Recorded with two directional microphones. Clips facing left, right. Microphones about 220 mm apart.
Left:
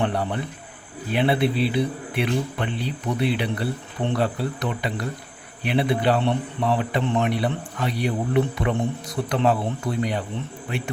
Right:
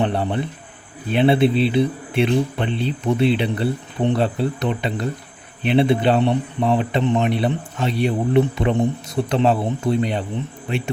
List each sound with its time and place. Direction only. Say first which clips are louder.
0.0 s a man's voice: right 4 dB; 25° right (ahead or behind)